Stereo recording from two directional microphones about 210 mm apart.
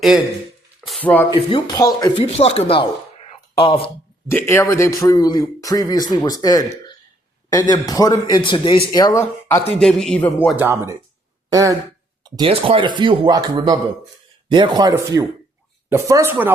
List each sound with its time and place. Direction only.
0.9 s speech: 5° left (ahead or behind)
1.5 s speech: 20° left (ahead or behind)
4.3 s a man's voice: 10° left (ahead or behind)
9.2 s speech: 5° left (ahead or behind)
10.6 s speech: 10° right (ahead or behind)